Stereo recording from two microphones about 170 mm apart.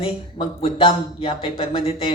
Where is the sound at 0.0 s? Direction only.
30° left (ahead or behind).